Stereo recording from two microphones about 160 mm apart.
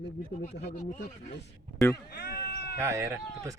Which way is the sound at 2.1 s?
75° left (ahead or behind).